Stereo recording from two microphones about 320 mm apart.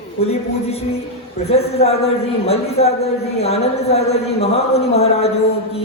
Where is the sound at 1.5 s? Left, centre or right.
Centre.